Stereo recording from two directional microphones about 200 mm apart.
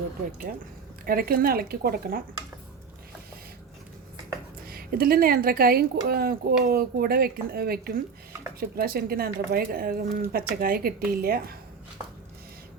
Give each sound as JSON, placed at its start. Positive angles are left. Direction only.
{"t": 1.0, "sound": "speech", "side_deg": -45}
{"t": 4.6, "sound": "speech", "side_deg": -50}